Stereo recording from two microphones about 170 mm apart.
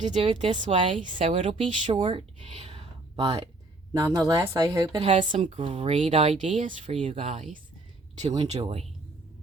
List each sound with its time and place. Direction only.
0.0 s speech: 40° right (ahead or behind); by 4.9 s 20° right (ahead or behind)
4.9 s speech: 35° right (ahead or behind)